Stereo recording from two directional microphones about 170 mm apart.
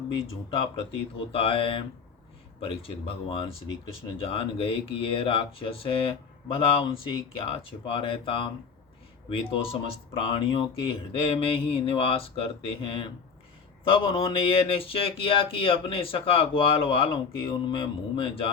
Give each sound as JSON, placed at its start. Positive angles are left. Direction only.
{"t": 1.3, "sound": "speech", "side_deg": 35}